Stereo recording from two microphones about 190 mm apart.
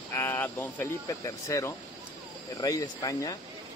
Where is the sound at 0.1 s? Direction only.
15° left (ahead or behind).